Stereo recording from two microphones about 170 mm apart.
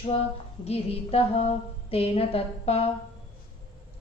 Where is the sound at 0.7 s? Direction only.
35° left (ahead or behind).